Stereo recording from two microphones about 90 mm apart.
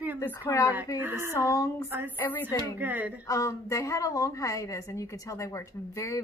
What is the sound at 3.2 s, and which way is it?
Speech, 40° left (ahead or behind).